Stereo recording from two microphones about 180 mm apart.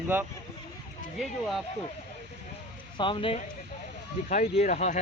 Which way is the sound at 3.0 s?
30° left (ahead or behind).